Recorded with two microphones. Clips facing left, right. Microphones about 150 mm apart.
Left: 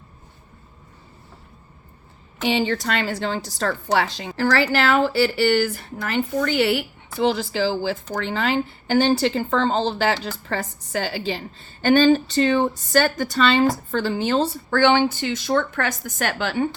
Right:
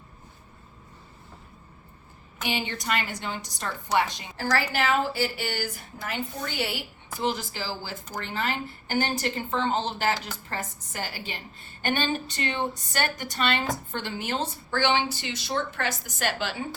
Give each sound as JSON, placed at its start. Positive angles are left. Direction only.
{"t": 2.5, "sound": "a woman's voice", "side_deg": 75}
{"t": 7.2, "sound": "a woman's voice", "side_deg": 90}
{"t": 14.7, "sound": "a woman's voice", "side_deg": 55}